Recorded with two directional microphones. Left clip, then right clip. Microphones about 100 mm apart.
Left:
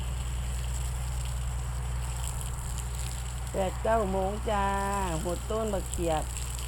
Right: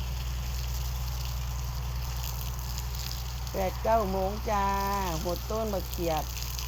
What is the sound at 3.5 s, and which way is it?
Speech, 25° left (ahead or behind).